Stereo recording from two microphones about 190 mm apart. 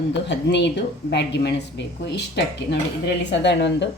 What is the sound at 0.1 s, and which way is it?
A woman's voice, 65° left (ahead or behind).